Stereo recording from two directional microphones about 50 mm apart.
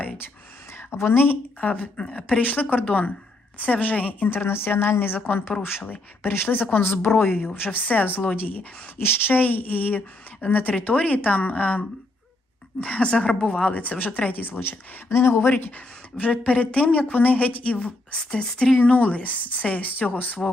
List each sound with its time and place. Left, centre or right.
0.7 s a woman's voice: left
1.6 s a woman's voice: left
2.0 s speech: centre
2.4 s a woman's voice: left
4.3 s a woman's voice: left
9.0 s a woman's voice: left
12.8 s a woman's voice: left
13.7 s a woman's voice: left
15.7 s speech: left
18.8 s a woman's voice: left